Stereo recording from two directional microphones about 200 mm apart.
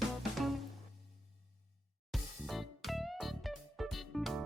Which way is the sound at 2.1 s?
Centre (ahead or behind).